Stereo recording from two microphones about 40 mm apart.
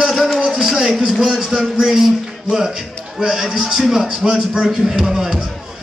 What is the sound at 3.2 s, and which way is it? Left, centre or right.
Speech, centre.